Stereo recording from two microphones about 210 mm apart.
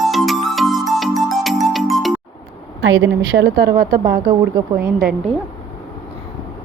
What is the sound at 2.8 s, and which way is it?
A woman's voice, 65° right (ahead or behind).